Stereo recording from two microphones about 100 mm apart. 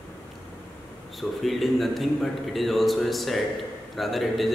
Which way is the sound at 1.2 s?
Centre (ahead or behind).